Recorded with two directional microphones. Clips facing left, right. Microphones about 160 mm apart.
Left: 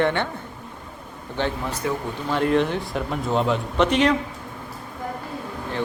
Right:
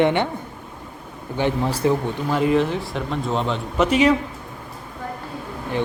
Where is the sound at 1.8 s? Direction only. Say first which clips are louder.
Right 7 dB; 25° right (ahead or behind).